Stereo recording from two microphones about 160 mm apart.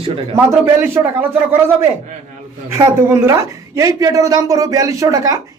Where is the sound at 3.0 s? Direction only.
15° right (ahead or behind).